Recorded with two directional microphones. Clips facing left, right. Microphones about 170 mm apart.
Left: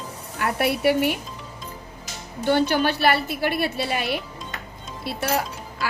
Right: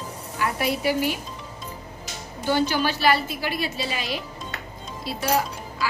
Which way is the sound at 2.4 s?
60° left (ahead or behind).